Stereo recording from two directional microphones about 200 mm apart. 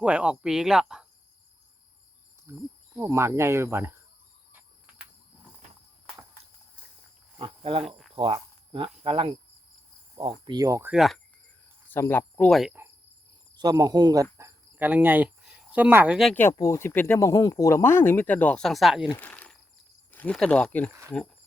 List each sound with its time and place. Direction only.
0.0 s speech: 5° right (ahead or behind)
2.5 s cricket: 15° right (ahead or behind)
7.3 s speech: 25° right (ahead or behind)
7.9 s cricket: centre (ahead or behind)
8.1 s speech: 30° right (ahead or behind)
10.4 s cricket: 20° right (ahead or behind)
10.9 s speech: centre (ahead or behind)
11.9 s speech: 10° left (ahead or behind)
13.6 s speech: 20° right (ahead or behind)
14.3 s cricket: 10° right (ahead or behind)
16.3 s speech: 10° left (ahead or behind)
19.2 s insect: 5° left (ahead or behind)
20.1 s speech: 10° left (ahead or behind)